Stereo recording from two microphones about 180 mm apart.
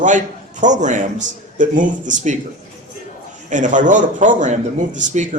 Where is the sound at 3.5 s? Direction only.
45° right (ahead or behind).